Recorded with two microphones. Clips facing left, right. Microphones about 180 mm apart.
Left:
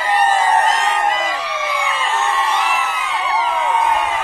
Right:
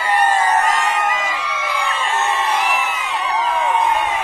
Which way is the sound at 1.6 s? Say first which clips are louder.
Even; 15° left (ahead or behind).